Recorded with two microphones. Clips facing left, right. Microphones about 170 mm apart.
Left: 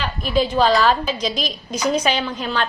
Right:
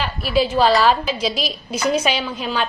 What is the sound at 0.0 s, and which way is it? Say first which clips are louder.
A woman's voice: right 1 dB; 5° right (ahead or behind).